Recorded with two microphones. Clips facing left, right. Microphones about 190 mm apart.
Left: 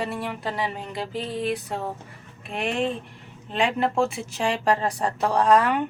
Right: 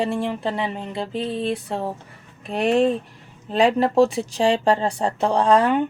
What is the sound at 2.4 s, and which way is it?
Speech, 40° right (ahead or behind).